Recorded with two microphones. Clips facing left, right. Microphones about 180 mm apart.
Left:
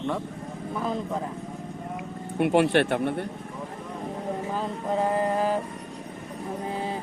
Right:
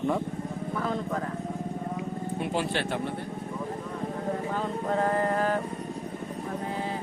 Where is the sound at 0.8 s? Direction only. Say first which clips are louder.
Left 2 dB; 15° left (ahead or behind).